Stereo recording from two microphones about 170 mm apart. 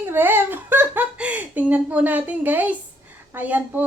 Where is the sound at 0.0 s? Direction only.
15° right (ahead or behind).